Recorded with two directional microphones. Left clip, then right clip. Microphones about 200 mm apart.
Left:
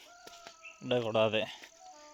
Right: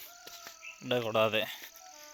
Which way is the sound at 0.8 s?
15° left (ahead or behind).